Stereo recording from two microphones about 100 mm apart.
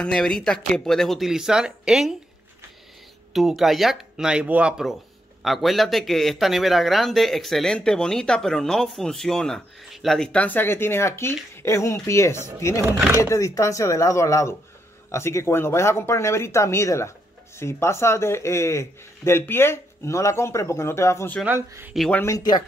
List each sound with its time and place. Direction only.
0.0 s a man's voice: 5° left (ahead or behind)
3.3 s a man's voice: centre (ahead or behind); by 21.3 s 25° left (ahead or behind)
21.5 s speech: 20° right (ahead or behind)
22.2 s speech: 40° left (ahead or behind)